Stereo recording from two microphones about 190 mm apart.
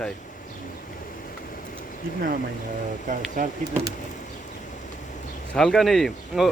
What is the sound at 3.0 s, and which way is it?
Speech, 40° right (ahead or behind).